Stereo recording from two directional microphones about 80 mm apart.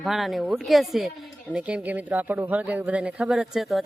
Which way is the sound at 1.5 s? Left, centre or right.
Centre.